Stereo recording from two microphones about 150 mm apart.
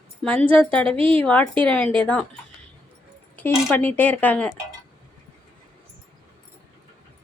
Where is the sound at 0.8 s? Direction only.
40° right (ahead or behind).